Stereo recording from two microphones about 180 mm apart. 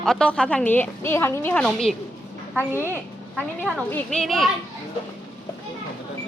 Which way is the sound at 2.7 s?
15° left (ahead or behind).